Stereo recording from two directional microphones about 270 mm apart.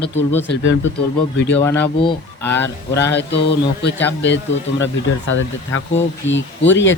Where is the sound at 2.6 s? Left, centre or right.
Left.